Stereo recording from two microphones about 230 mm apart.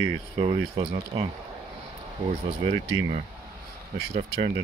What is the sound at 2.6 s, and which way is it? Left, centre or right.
Speech, right.